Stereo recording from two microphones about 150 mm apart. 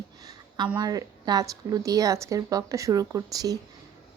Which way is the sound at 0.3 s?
30° right (ahead or behind).